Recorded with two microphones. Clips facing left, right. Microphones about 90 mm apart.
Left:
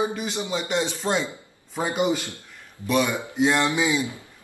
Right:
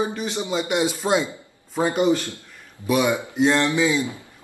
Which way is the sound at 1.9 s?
15° left (ahead or behind).